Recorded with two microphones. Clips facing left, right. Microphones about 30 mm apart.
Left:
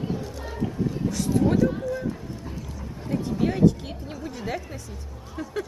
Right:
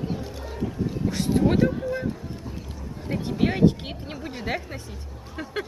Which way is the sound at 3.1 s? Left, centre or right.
Right.